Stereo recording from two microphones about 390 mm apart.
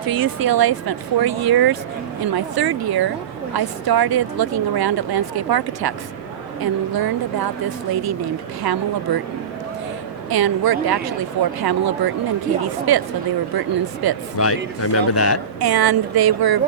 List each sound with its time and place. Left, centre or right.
0.0 s speech: right
8.6 s speech: right
10.2 s speech: right
14.0 s speech: right
14.3 s speech: left
15.6 s speech: right